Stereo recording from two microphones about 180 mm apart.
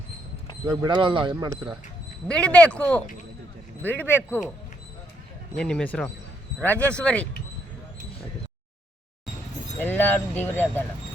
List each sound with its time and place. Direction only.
0.7 s speech: 20° right (ahead or behind)
2.2 s speech: 5° left (ahead or behind)
5.5 s speech: 5° left (ahead or behind)
9.7 s speech: 10° left (ahead or behind)